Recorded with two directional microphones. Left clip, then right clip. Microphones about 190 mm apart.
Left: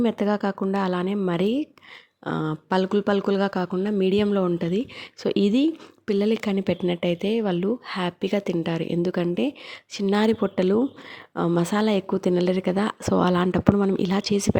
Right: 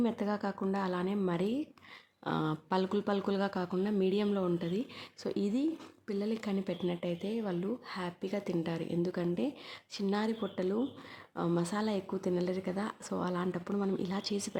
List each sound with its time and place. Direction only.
0.0 s speech: 40° left (ahead or behind)
2.2 s speech: 30° left (ahead or behind)